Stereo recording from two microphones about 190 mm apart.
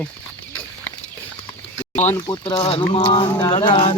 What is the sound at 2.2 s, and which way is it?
Mantra, 25° left (ahead or behind).